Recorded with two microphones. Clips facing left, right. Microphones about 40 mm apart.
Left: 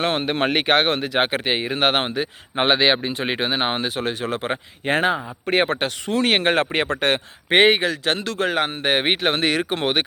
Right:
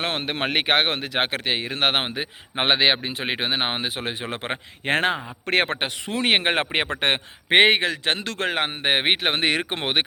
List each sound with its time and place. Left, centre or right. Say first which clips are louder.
0.0 s speech: left 5 dB; centre
1.3 s speech: left 3 dB; centre
1.8 s speech: left 2 dB; centre
2.0 s speech: left 4 dB; centre
4.2 s speech: left 5 dB; right
4.9 s speech: left 2 dB; right
5.5 s speech: left 1 dB; right
6.2 s a man's voice: left 1 dB; centre